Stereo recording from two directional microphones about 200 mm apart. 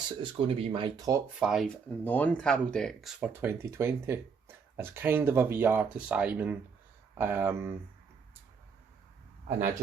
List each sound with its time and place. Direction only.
0.2 s speech: 25° right (ahead or behind)
1.4 s speech: centre (ahead or behind)